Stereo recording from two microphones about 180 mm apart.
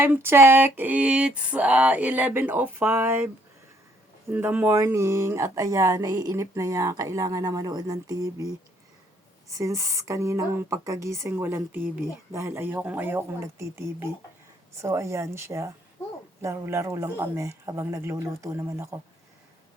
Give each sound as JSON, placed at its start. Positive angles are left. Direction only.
{"t": 0.0, "sound": "speech", "side_deg": -10}
{"t": 4.3, "sound": "speech", "side_deg": -10}